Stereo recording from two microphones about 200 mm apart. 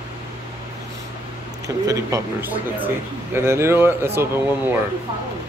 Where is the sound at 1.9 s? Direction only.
15° right (ahead or behind).